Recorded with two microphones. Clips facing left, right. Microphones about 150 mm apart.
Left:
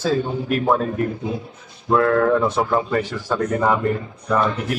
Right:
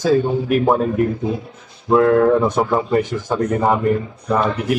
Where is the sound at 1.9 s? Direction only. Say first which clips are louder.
Right 4 dB; 20° right (ahead or behind).